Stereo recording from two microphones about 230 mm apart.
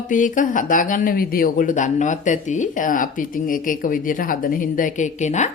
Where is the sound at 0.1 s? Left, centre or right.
Left.